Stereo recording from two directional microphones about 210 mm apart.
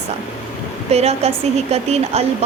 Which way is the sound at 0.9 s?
30° right (ahead or behind).